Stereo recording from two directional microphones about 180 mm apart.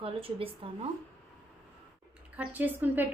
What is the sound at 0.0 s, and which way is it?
Speech, 30° right (ahead or behind).